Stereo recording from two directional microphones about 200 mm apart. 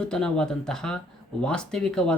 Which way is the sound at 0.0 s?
5° left (ahead or behind).